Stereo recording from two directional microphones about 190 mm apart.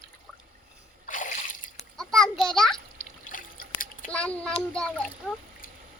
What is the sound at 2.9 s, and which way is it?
Water, 45° left (ahead or behind).